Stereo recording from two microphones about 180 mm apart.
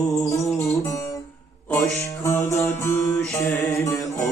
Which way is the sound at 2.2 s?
15° left (ahead or behind).